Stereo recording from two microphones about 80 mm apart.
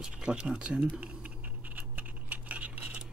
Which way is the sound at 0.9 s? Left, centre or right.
Centre.